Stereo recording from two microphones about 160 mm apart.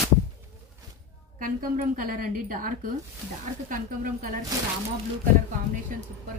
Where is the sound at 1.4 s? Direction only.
60° right (ahead or behind).